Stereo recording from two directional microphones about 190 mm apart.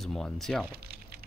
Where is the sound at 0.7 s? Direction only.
55° right (ahead or behind).